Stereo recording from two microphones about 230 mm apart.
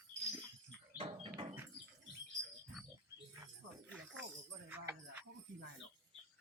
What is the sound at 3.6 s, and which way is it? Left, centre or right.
Jingle bell, right.